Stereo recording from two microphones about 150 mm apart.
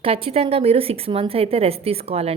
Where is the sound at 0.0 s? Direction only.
40° right (ahead or behind).